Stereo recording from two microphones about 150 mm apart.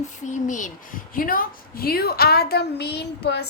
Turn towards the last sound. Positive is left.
turn(degrees=90)